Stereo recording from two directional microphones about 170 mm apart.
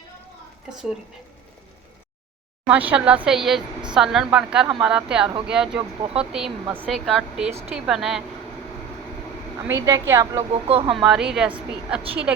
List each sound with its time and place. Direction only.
0.7 s speech: 5° right (ahead or behind)
2.6 s speech: 10° right (ahead or behind)
9.6 s speech: 15° right (ahead or behind)
10.5 s speech: 35° right (ahead or behind)
10.9 s speech: 5° right (ahead or behind)